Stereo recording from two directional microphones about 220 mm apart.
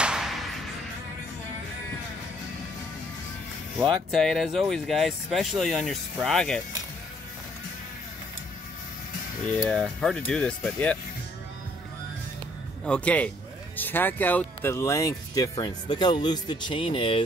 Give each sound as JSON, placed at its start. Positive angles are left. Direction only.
{"t": 0.0, "sound": "music", "side_deg": -5}
{"t": 4.1, "sound": "speech", "side_deg": 0}
{"t": 9.7, "sound": "speech", "side_deg": 0}
{"t": 12.8, "sound": "speech", "side_deg": 5}